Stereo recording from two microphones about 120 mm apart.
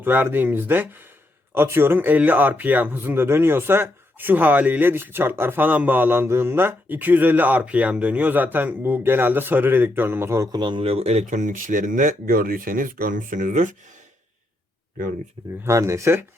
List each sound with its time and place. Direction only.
0.0 s speech: 15° right (ahead or behind)
10.6 s speech: 40° right (ahead or behind); by 12.1 s 90° right
13.1 s speech: 90° right
15.6 s speech: 25° right (ahead or behind)